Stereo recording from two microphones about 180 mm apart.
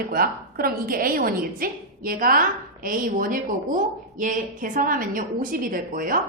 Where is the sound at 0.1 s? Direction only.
55° right (ahead or behind).